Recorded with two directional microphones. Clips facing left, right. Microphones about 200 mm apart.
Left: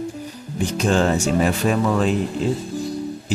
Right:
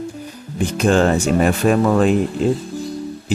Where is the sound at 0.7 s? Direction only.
55° right (ahead or behind).